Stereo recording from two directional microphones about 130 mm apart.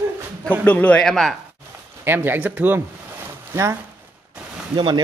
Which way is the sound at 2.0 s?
15° right (ahead or behind).